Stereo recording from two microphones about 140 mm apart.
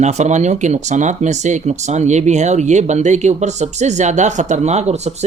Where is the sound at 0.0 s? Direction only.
55° right (ahead or behind).